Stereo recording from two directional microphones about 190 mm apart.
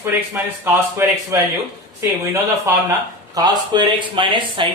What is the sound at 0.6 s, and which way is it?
Speech, 10° right (ahead or behind).